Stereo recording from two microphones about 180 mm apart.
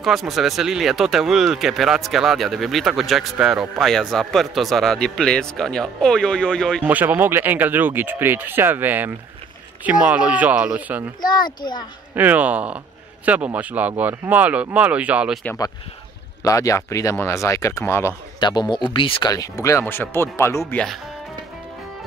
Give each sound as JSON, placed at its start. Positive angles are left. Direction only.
{"t": 0.0, "sound": "speech", "side_deg": 0}
{"t": 6.8, "sound": "speech", "side_deg": -10}
{"t": 11.1, "sound": "a child's voice", "side_deg": 25}
{"t": 12.2, "sound": "speech", "side_deg": -10}
{"t": 16.4, "sound": "speech", "side_deg": 20}